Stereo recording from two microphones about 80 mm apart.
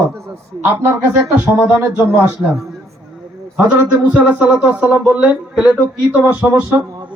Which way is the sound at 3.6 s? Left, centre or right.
Centre.